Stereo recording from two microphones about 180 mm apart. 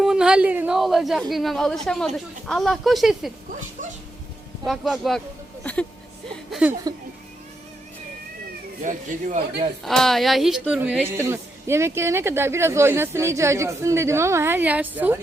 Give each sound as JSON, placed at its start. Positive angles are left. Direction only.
{"t": 0.0, "sound": "a woman's voice", "side_deg": -5}
{"t": 4.6, "sound": "a woman's voice", "side_deg": 0}
{"t": 6.5, "sound": "a woman's voice", "side_deg": -5}
{"t": 8.8, "sound": "speech", "side_deg": -45}
{"t": 9.8, "sound": "a woman's voice", "side_deg": 0}